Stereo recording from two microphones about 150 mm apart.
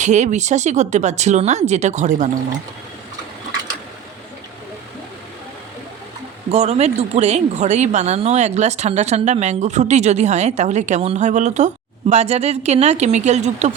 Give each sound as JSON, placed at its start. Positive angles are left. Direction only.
{"t": 0.0, "sound": "speech", "side_deg": -50}
{"t": 6.5, "sound": "speech", "side_deg": -45}